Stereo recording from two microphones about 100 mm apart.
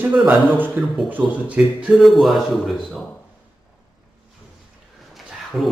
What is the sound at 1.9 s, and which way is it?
A man's voice, centre (ahead or behind).